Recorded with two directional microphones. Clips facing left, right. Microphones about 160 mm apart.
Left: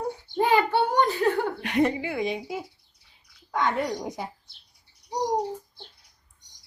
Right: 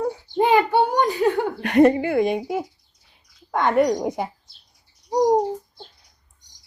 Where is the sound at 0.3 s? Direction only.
20° right (ahead or behind).